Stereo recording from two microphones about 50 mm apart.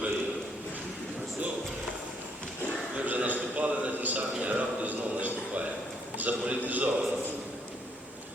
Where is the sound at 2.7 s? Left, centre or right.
Right.